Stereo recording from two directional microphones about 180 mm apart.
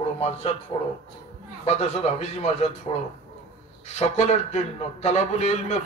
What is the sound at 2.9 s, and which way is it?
A man's voice, 35° left (ahead or behind).